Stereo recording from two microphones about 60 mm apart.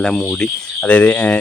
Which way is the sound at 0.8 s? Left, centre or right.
Left.